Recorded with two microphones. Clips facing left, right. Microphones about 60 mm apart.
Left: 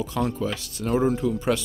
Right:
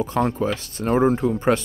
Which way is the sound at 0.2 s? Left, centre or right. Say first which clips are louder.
Right 4 dB; right.